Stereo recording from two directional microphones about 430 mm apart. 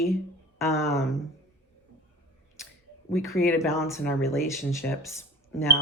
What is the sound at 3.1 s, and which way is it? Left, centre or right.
Speech, centre.